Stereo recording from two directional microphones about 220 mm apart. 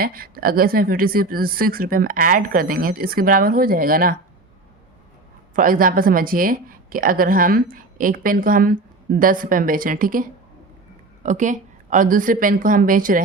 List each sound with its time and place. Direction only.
0.0 s a woman's voice: 40° right (ahead or behind)
5.5 s a woman's voice: 40° right (ahead or behind)